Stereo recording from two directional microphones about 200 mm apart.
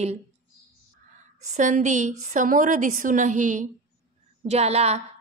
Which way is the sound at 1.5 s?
40° right (ahead or behind).